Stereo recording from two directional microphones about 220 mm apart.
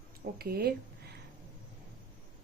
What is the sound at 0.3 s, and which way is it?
Speech, 45° right (ahead or behind).